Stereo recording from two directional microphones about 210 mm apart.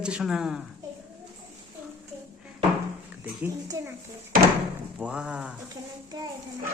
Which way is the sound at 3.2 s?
10° right (ahead or behind).